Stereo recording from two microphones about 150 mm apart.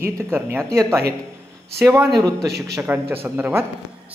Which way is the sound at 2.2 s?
25° right (ahead or behind).